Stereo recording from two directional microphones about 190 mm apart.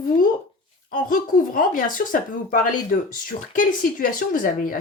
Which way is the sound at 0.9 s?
45° left (ahead or behind).